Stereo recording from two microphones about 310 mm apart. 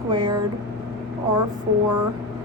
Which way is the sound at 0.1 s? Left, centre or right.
Centre.